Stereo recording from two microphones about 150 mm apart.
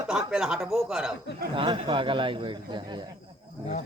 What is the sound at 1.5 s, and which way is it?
A man's voice, 35° right (ahead or behind).